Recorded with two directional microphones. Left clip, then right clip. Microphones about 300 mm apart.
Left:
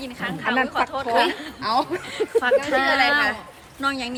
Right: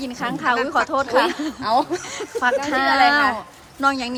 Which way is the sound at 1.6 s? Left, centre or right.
Right.